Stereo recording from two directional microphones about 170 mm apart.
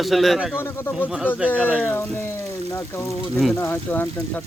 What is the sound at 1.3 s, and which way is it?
Speech, 10° right (ahead or behind).